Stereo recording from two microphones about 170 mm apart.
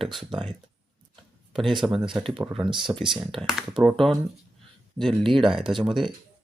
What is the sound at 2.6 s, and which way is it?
Speech, 30° right (ahead or behind).